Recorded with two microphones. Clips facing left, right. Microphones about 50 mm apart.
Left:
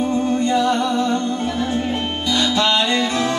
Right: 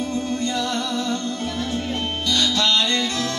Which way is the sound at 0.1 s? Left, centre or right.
Left.